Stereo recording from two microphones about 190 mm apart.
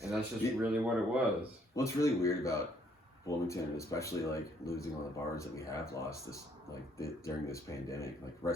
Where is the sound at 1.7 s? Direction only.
15° left (ahead or behind).